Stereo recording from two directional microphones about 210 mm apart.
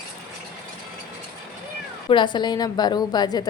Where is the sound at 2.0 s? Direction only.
20° left (ahead or behind).